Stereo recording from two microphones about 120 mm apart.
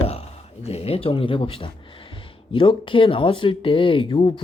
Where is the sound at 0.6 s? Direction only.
55° left (ahead or behind).